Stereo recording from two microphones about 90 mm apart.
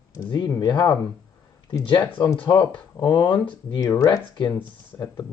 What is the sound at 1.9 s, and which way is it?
Speech, 60° left (ahead or behind).